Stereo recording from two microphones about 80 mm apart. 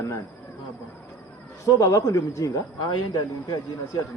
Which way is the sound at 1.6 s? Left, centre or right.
Left.